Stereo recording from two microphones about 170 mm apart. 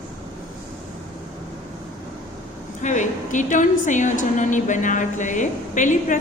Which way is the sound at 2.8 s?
45° left (ahead or behind).